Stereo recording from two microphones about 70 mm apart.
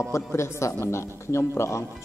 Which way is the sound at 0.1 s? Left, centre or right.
Left.